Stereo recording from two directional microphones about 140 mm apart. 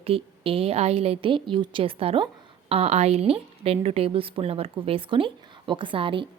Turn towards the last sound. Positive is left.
turn(degrees=-35)  # may be behind; listen again after turning